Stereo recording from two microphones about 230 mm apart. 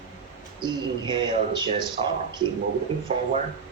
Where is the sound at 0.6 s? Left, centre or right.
Centre.